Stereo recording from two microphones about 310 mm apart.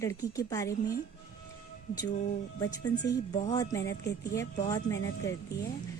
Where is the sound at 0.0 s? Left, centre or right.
Centre.